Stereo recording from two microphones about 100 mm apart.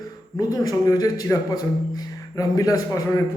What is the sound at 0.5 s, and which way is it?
Speech, 35° left (ahead or behind).